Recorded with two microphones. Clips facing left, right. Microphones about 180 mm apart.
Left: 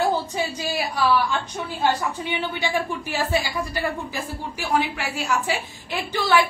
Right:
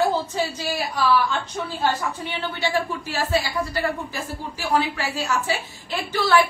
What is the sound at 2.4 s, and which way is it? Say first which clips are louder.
A woman's voice: right 3 dB; 15° left (ahead or behind).